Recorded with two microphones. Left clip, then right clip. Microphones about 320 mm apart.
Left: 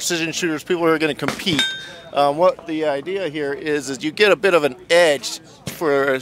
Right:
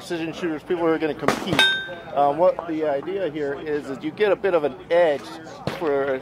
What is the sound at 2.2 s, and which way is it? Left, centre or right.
Speech, left.